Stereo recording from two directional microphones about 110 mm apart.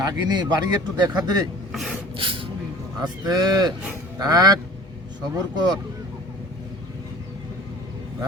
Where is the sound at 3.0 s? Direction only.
40° right (ahead or behind).